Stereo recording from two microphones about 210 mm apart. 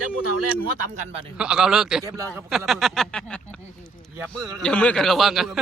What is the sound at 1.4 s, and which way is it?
Speech, 5° right (ahead or behind).